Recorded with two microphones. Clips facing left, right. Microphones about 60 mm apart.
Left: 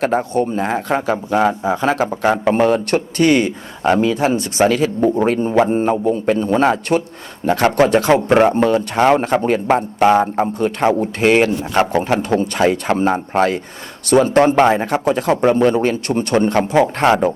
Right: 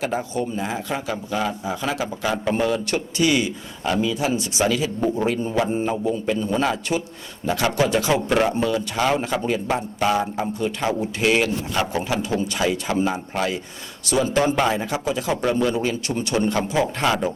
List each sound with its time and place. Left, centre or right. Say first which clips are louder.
0.0 s speech: left 8 dB; left